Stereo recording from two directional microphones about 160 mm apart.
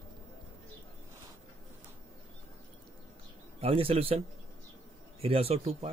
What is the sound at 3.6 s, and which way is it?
Speech, 35° right (ahead or behind).